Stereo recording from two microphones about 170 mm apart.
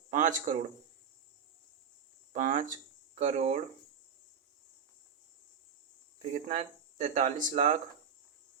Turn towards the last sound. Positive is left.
turn(degrees=-45)  # may be behind; listen again after turning